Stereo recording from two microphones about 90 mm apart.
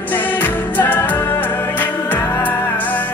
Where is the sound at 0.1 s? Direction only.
20° left (ahead or behind).